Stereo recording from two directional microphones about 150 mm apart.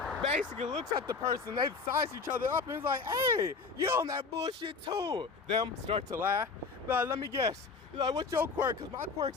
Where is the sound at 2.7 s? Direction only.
15° right (ahead or behind).